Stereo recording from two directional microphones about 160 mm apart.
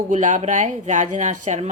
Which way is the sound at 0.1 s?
50° right (ahead or behind).